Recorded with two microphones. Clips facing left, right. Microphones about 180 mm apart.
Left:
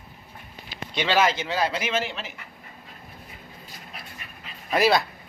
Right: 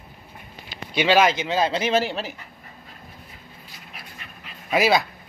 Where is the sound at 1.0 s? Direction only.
15° right (ahead or behind); by 2.4 s 35° right (ahead or behind).